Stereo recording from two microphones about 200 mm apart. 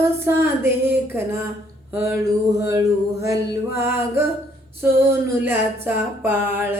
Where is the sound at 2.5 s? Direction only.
15° right (ahead or behind).